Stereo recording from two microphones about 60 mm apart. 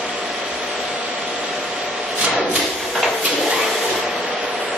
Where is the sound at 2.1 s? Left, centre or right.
Centre.